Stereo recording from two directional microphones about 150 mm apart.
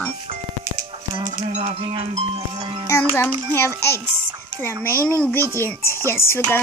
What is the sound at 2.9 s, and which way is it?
Speech, 15° left (ahead or behind).